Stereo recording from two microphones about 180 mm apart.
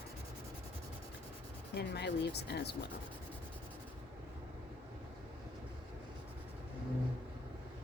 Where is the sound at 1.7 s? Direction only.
70° left (ahead or behind).